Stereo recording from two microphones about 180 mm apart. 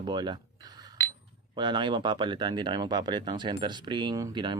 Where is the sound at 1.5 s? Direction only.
25° right (ahead or behind).